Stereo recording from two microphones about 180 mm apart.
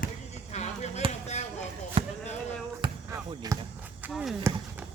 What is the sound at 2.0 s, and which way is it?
Basketball bounce, 30° right (ahead or behind).